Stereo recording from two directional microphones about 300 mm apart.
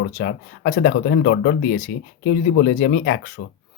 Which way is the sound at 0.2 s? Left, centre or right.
Left.